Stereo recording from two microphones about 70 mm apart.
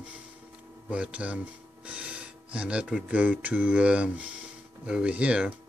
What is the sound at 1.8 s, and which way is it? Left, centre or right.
Gasp, centre.